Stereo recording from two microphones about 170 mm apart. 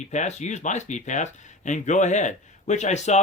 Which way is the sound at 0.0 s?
45° left (ahead or behind).